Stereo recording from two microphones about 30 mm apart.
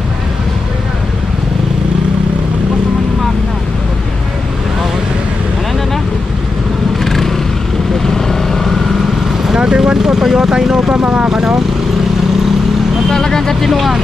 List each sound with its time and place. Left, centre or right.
7.1 s vehicle: centre
9.6 s vehicle: right
11.0 s speech: right
11.2 s speech: right
13.1 s vehicle: centre
13.7 s speech: centre